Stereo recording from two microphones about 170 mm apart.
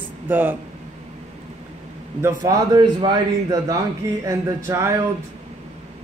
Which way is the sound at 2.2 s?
20° right (ahead or behind).